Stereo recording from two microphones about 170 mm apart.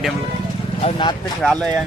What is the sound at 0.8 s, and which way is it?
Speech, 25° left (ahead or behind).